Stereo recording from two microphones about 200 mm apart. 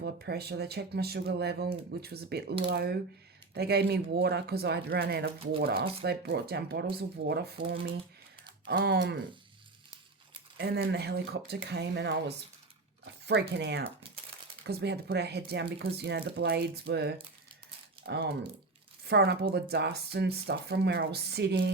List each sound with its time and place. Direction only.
0.0 s speech: 55° right (ahead or behind)
8.6 s speech: 55° right (ahead or behind)
10.6 s speech: 55° right (ahead or behind)
13.6 s speech: 55° right (ahead or behind)